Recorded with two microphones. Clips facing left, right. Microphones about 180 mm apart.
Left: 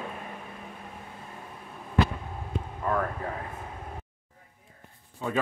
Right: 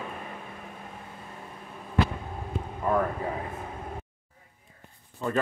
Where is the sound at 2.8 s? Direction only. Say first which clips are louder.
Right 3 dB; 10° right (ahead or behind).